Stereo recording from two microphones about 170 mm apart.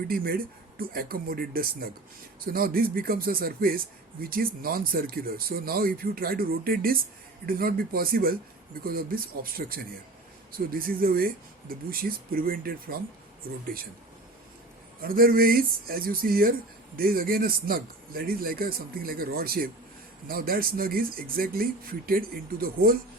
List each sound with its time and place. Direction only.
0.1 s speech: 60° right (ahead or behind)
15.0 s speech: 60° right (ahead or behind)